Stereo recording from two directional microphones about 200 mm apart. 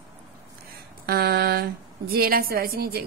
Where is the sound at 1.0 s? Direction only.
50° right (ahead or behind).